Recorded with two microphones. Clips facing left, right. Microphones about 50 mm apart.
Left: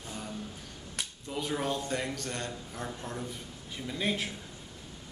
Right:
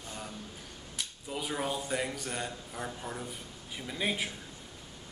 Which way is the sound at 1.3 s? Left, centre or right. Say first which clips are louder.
Left 2 dB; centre.